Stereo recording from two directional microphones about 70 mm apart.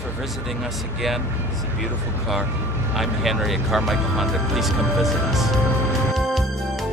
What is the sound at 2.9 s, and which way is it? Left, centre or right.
Speech, centre.